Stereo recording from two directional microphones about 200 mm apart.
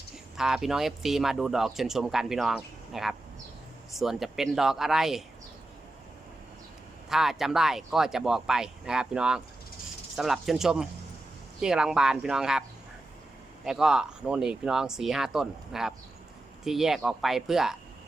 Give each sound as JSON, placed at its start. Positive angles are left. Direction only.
{"t": 0.3, "sound": "speech", "side_deg": 0}
{"t": 7.1, "sound": "speech", "side_deg": 0}
{"t": 13.7, "sound": "speech", "side_deg": 0}